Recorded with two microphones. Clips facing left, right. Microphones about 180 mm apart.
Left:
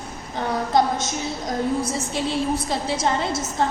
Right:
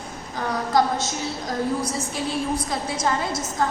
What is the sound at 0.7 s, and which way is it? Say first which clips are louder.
A woman's voice: even; 20° left (ahead or behind).